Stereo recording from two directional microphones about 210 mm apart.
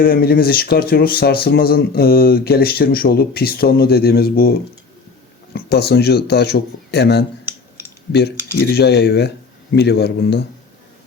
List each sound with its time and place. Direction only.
0.0 s speech: 45° left (ahead or behind)
5.5 s speech: 50° left (ahead or behind)
8.5 s speech: 50° left (ahead or behind)